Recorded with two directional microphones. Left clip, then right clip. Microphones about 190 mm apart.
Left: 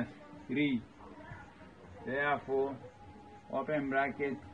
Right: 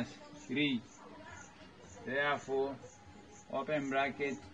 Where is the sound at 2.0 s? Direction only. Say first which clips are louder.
Left 1 dB; 15° right (ahead or behind).